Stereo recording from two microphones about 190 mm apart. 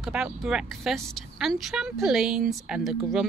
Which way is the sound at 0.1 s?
5° right (ahead or behind).